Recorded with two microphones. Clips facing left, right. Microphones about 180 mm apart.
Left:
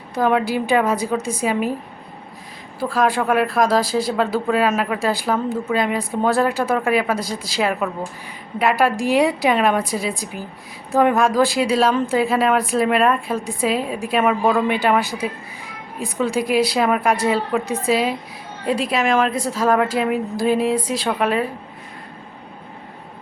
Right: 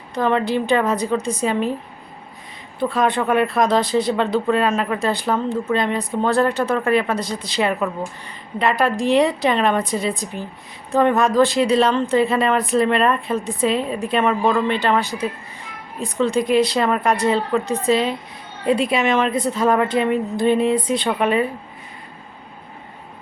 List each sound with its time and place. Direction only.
0.1 s a woman's voice: 5° left (ahead or behind)
2.7 s a woman's voice: centre (ahead or behind)